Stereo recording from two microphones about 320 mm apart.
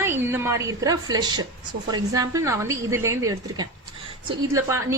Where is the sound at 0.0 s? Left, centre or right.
Centre.